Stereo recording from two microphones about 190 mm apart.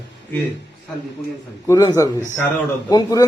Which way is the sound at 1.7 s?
15° left (ahead or behind).